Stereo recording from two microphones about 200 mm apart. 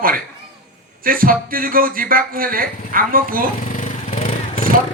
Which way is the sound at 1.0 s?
45° right (ahead or behind).